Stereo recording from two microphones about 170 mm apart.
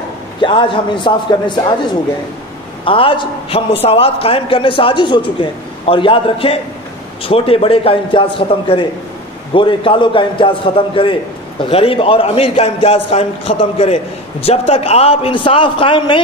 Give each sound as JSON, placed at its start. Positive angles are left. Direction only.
{"t": 0.4, "sound": "a man's voice", "side_deg": 30}
{"t": 2.8, "sound": "a man's voice", "side_deg": 30}